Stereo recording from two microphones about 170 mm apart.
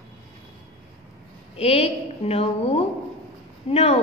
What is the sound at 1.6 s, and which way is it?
A woman's voice, 40° left (ahead or behind).